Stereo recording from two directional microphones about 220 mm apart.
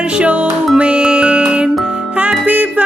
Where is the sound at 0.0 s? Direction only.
5° right (ahead or behind).